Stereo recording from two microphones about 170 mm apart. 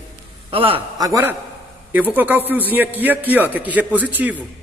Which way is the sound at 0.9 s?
20° right (ahead or behind).